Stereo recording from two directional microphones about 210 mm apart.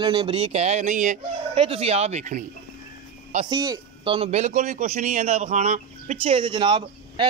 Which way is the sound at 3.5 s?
20° right (ahead or behind).